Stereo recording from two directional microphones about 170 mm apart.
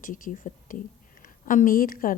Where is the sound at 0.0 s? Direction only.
55° left (ahead or behind).